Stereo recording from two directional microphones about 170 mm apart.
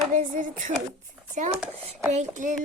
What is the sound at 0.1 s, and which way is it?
Speech, 50° right (ahead or behind).